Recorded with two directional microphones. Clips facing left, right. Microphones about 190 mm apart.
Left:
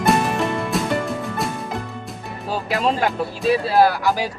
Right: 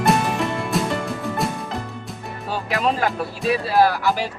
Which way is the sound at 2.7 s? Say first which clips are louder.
Left 1 dB; centre (ahead or behind).